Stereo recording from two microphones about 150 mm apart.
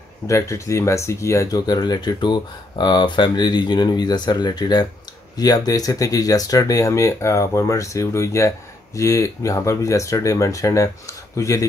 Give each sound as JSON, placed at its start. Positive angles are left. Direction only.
{"t": 0.3, "sound": "speech", "side_deg": 20}